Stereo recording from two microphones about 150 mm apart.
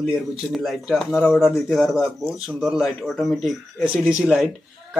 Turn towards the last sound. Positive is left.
turn(degrees=-5)  # may be behind; listen again after turning